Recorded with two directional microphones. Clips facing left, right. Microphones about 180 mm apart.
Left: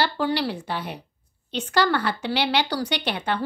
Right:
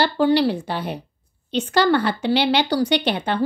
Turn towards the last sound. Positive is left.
turn(degrees=-25)  # may be behind; listen again after turning